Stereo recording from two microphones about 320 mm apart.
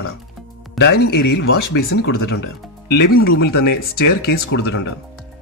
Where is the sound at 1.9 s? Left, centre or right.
Left.